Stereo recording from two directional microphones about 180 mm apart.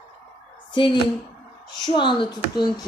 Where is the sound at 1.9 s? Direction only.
25° left (ahead or behind).